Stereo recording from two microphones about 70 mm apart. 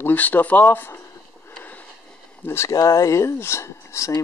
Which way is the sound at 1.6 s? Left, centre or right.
Left.